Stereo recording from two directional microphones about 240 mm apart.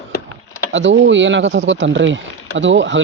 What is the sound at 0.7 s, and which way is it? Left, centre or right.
Speech, right.